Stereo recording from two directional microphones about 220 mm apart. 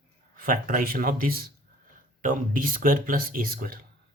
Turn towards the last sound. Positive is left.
turn(degrees=-40)  # may be behind; listen again after turning